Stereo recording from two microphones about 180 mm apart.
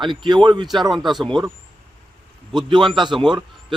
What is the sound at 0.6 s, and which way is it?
Speech, centre (ahead or behind).